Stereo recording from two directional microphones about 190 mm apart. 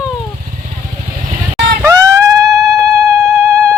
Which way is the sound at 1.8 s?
15° right (ahead or behind).